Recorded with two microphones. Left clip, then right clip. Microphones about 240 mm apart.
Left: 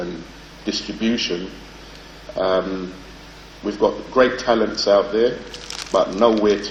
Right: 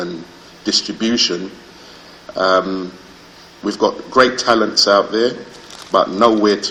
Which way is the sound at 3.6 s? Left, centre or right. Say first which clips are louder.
Right 2 dB; right.